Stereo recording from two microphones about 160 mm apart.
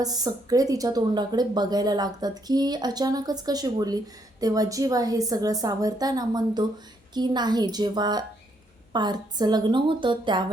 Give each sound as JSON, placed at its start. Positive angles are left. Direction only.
{"t": 0.0, "sound": "a woman's voice", "side_deg": -25}